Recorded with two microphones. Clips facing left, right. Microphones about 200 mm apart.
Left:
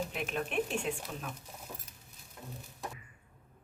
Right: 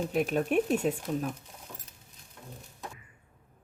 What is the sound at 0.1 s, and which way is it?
Speech, 40° right (ahead or behind).